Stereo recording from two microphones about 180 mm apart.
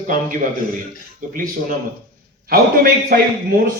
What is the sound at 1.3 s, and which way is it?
A man's voice, 50° right (ahead or behind).